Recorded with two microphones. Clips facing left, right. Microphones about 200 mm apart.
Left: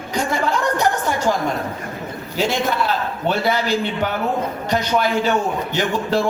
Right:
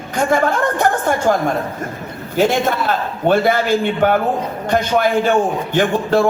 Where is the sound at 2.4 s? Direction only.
50° right (ahead or behind).